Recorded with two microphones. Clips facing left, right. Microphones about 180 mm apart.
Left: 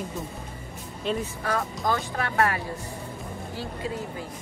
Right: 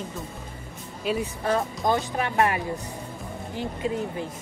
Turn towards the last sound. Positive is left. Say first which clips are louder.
# right 4 dB
turn(degrees=-20)  # may be behind; listen again after turning